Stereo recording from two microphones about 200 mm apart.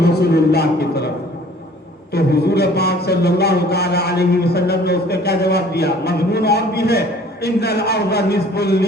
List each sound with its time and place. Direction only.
0.3 s speech: 55° left (ahead or behind)
2.1 s speech: 55° left (ahead or behind)